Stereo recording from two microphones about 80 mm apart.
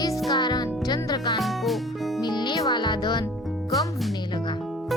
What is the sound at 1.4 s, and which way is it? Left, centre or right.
Music, centre.